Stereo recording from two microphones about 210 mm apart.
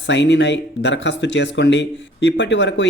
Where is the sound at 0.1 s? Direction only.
55° left (ahead or behind).